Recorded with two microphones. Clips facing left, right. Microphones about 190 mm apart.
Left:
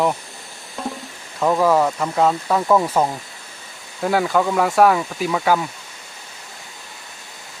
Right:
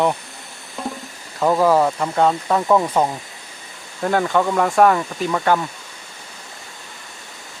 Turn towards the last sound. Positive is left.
turn(degrees=5)  # may be behind; listen again after turning